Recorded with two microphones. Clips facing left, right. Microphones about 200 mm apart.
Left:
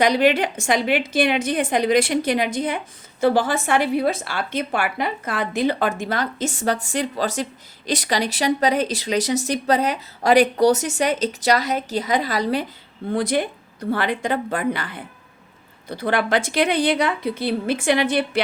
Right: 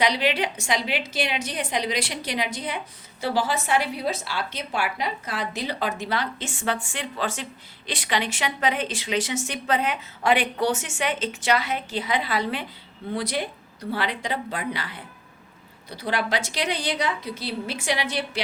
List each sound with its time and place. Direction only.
0.0 s a woman's voice: 50° left (ahead or behind)